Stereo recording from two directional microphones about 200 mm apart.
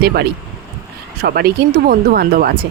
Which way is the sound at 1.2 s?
50° right (ahead or behind).